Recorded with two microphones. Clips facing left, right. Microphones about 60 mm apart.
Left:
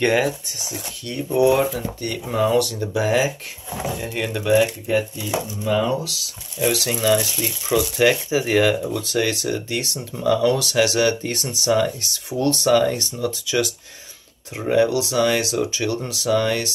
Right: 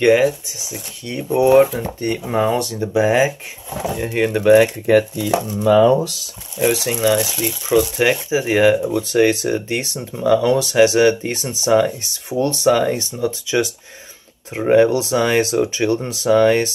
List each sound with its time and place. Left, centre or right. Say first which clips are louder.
0.0 s speech: right 6 dB; centre; by 4.5 s right
4.8 s speech: right 7 dB; right
6.6 s speech: right 4 dB; right
6.9 s speech: right 2 dB; centre; by 9.9 s right
9.9 s speech: right 4 dB; centre; by 16.7 s right